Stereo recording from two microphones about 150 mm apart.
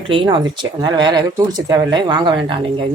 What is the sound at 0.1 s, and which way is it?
Speech, 35° right (ahead or behind).